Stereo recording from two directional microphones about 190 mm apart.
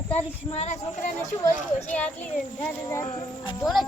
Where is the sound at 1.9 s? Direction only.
10° left (ahead or behind).